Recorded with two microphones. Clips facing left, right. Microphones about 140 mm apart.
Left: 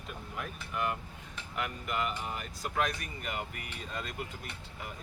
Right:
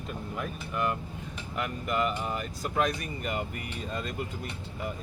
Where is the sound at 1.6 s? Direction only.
40° right (ahead or behind).